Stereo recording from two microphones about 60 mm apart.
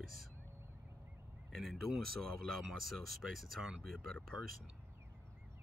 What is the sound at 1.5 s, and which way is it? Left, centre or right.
Speech, centre.